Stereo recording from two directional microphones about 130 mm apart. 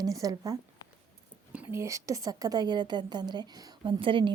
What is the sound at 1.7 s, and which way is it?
A woman's voice, 25° right (ahead or behind).